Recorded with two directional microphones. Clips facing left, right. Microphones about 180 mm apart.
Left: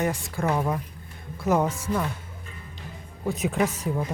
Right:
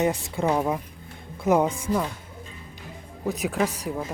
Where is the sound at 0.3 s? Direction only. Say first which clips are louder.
Right 1 dB; 15° right (ahead or behind).